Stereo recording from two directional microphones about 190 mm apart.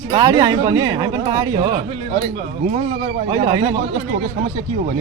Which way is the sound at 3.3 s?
20° right (ahead or behind).